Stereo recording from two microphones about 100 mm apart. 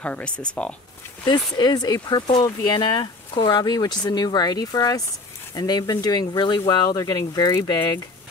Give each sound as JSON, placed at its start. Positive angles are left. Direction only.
{"t": 0.0, "sound": "speech", "side_deg": 10}
{"t": 1.2, "sound": "speech", "side_deg": 45}